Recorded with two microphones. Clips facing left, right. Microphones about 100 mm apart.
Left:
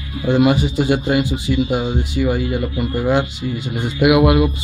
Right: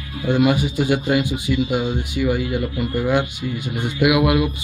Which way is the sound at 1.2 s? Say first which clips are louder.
Left 2 dB; 10° right (ahead or behind).